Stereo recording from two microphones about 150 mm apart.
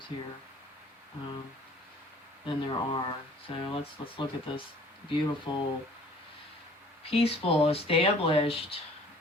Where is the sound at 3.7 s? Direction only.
35° left (ahead or behind).